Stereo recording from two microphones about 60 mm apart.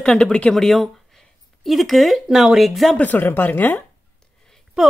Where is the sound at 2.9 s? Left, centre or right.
Left.